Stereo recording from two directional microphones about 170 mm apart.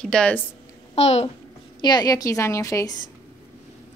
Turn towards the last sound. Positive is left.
turn(degrees=20)  # may be behind; listen again after turning